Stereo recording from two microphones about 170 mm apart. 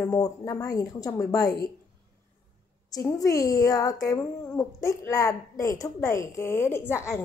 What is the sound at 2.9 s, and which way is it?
Speech, 20° left (ahead or behind).